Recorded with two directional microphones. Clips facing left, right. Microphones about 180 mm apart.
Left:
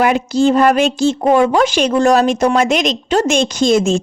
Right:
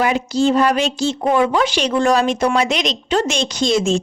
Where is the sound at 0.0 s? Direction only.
55° left (ahead or behind).